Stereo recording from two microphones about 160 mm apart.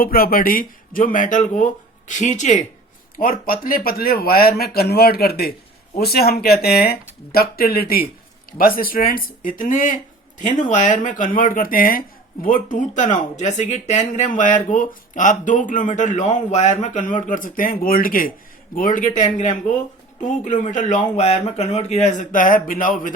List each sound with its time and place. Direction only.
0.0 s speech: 65° left (ahead or behind); by 2.6 s 50° left (ahead or behind)
3.2 s speech: 65° left (ahead or behind)